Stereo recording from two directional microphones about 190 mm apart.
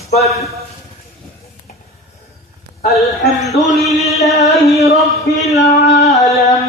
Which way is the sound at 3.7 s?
Centre (ahead or behind).